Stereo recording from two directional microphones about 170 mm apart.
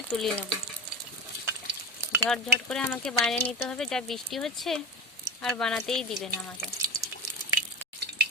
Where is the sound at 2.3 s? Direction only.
5° left (ahead or behind).